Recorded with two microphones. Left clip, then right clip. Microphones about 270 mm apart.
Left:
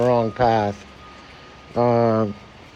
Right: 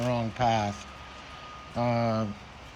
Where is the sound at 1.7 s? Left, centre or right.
Centre.